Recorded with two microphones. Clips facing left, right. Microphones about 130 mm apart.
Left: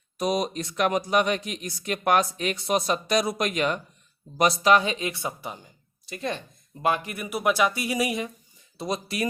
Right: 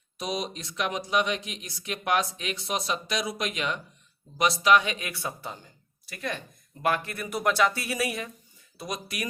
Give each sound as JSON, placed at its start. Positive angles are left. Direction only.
{"t": 0.2, "sound": "speech", "side_deg": 50}
{"t": 4.6, "sound": "speech", "side_deg": 35}
{"t": 8.8, "sound": "speech", "side_deg": 30}